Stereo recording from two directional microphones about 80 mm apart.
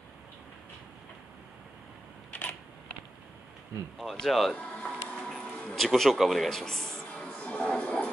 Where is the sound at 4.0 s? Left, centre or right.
Centre.